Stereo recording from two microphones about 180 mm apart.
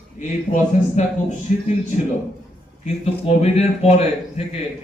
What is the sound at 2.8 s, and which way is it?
Speech, 35° left (ahead or behind).